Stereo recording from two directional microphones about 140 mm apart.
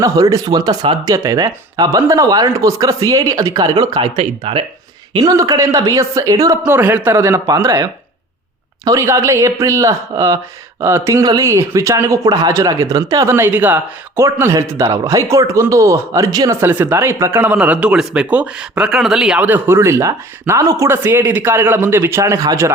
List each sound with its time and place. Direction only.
0.0 s speech: 25° right (ahead or behind); by 4.6 s 45° right (ahead or behind)
5.1 s speech: 25° right (ahead or behind)
16.6 s speech: 15° right (ahead or behind)